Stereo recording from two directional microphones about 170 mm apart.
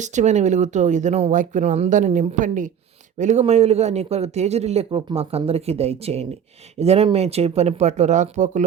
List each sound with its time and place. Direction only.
0.0 s speech: 45° right (ahead or behind)